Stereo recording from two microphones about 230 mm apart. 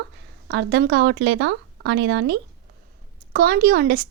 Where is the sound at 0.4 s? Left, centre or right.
Right.